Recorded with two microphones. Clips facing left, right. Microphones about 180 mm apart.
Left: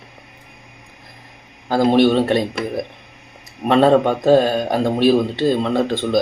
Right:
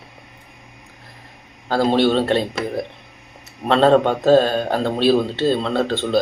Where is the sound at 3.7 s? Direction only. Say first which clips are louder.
Left 1 dB; 10° left (ahead or behind).